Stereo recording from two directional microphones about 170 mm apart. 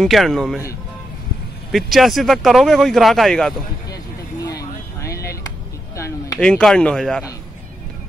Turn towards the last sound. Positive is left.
turn(degrees=5)  # may be behind; listen again after turning